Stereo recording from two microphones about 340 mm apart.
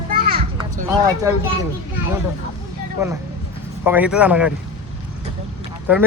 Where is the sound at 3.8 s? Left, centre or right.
Centre.